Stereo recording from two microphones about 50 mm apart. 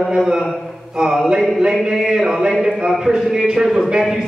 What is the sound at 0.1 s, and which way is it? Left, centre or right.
Speech, centre.